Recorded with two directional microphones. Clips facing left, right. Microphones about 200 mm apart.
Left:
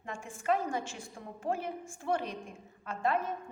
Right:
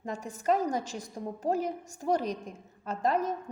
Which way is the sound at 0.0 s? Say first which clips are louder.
Right 5 dB; 40° right (ahead or behind).